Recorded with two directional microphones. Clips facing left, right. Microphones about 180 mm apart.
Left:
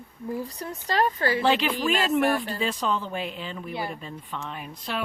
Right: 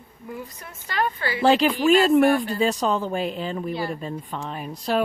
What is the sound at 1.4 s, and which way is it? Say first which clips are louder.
Speech: right 9 dB; 40° right (ahead or behind).